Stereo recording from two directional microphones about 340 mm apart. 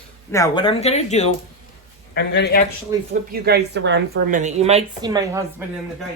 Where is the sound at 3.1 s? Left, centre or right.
Right; by 5.4 s centre.